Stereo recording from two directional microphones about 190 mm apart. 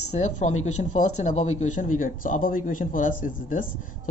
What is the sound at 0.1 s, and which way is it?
Speech, 35° left (ahead or behind).